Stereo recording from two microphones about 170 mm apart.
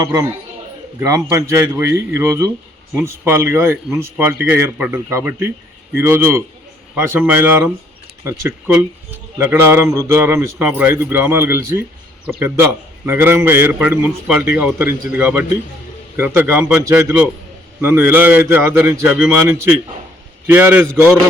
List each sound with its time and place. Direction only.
0.0 s a man's voice: 15° right (ahead or behind)